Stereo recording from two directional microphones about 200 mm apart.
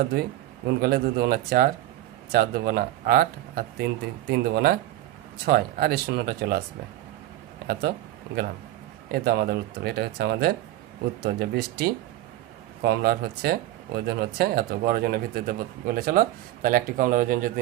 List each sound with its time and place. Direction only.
0.8 s speech: 50° right (ahead or behind)
7.7 s speech: 50° right (ahead or behind)
9.1 s speech: 50° right (ahead or behind)